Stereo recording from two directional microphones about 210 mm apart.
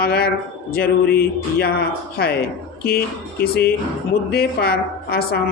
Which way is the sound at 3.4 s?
50° left (ahead or behind).